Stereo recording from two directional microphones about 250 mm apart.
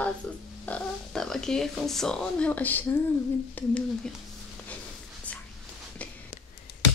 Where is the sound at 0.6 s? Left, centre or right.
Centre.